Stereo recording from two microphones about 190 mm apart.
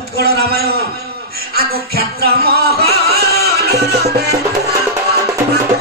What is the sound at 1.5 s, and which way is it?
Music, 55° right (ahead or behind).